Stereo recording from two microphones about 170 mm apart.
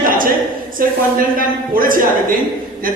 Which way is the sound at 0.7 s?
55° right (ahead or behind).